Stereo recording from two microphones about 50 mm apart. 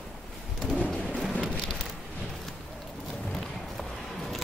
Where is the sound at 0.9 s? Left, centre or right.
Centre.